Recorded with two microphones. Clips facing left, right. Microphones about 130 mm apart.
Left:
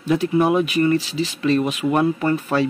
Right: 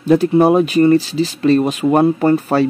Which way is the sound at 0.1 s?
35° right (ahead or behind).